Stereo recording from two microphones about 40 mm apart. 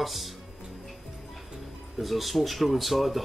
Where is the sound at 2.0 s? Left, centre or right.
Centre.